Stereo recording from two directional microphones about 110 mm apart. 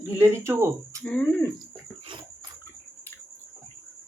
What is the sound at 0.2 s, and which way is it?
Speech, 20° right (ahead or behind).